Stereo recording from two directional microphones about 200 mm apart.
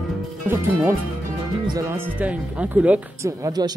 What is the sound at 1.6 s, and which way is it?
Speech, 15° right (ahead or behind).